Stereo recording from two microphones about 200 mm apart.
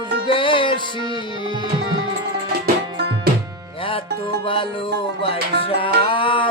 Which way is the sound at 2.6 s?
55° right (ahead or behind).